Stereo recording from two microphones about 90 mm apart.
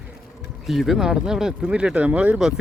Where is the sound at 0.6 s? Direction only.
Centre (ahead or behind); by 2.4 s 15° right (ahead or behind).